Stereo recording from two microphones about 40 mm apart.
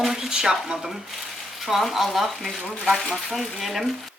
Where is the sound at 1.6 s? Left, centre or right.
Centre.